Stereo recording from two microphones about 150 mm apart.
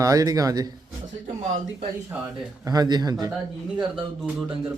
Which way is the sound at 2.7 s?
25° right (ahead or behind).